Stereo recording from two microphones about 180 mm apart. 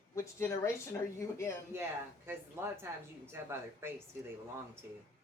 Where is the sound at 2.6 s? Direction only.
15° right (ahead or behind).